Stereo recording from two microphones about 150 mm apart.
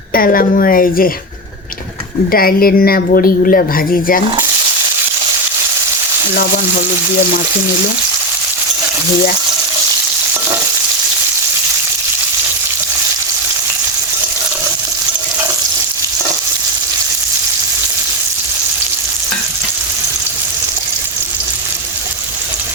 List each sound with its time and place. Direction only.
0.1 s a woman's voice: 75° left (ahead or behind)
2.3 s a woman's voice: 80° left